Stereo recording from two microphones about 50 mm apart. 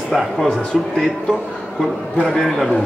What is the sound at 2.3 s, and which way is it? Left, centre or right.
Speech, centre.